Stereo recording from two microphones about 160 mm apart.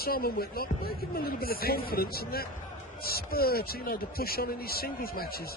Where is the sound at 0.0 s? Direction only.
70° left (ahead or behind).